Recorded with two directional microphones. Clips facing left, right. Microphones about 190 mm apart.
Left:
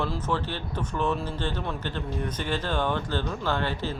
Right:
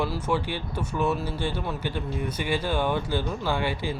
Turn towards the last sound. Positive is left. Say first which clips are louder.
# right 1 dB
turn(degrees=-10)  # may be behind; listen again after turning